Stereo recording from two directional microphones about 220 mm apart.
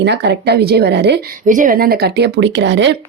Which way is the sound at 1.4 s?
35° right (ahead or behind).